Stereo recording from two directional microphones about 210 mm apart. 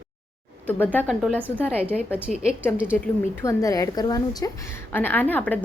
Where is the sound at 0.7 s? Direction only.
5° left (ahead or behind).